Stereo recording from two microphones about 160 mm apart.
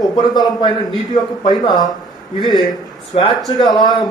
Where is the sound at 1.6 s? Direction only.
25° left (ahead or behind).